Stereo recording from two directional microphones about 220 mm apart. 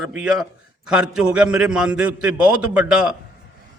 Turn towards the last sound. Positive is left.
turn(degrees=-5)  # may be behind; listen again after turning